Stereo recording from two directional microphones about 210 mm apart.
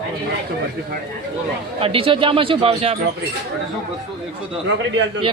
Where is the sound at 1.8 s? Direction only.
25° right (ahead or behind).